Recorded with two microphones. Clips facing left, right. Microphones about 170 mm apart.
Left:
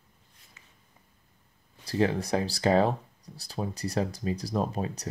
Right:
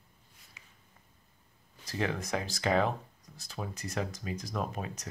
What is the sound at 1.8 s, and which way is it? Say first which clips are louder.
Speech: left 7 dB; 30° left (ahead or behind).